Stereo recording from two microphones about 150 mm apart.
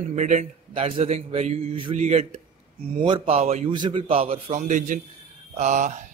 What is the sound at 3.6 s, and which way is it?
A man's voice, 30° right (ahead or behind).